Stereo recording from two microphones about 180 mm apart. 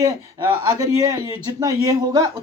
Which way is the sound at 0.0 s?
20° right (ahead or behind).